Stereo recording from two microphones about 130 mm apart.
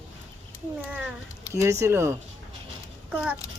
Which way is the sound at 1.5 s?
25° right (ahead or behind).